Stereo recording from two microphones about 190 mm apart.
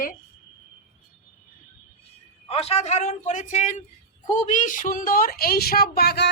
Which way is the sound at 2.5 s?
30° left (ahead or behind).